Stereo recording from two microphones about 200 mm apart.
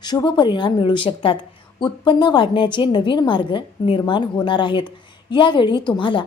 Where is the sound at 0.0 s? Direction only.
20° left (ahead or behind).